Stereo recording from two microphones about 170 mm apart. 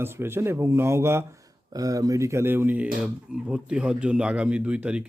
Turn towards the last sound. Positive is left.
turn(degrees=-5)  # may be behind; listen again after turning